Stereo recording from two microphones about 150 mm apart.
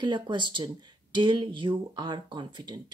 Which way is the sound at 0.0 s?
30° right (ahead or behind).